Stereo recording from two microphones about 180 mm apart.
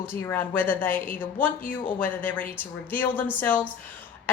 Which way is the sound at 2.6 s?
10° left (ahead or behind).